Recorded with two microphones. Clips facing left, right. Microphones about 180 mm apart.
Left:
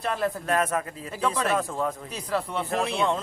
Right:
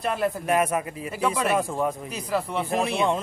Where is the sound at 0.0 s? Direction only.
10° right (ahead or behind).